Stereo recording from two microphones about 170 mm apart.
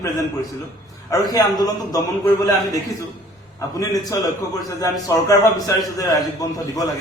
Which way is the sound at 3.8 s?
20° left (ahead or behind).